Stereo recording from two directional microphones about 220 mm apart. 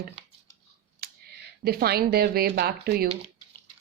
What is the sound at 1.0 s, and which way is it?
Speech, 45° right (ahead or behind).